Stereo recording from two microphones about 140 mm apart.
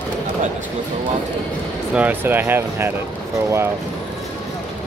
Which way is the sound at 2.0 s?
15° right (ahead or behind).